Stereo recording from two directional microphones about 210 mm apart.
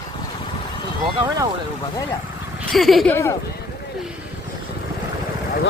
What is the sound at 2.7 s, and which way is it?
Speech, centre (ahead or behind).